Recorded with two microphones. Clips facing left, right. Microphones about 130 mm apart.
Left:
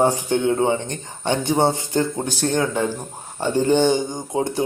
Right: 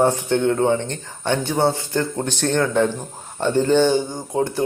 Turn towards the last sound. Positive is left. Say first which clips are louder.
# right 1 dB
turn(degrees=15)  # may be behind; listen again after turning